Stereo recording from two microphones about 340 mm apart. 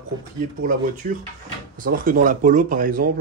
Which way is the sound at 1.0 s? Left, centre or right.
Right.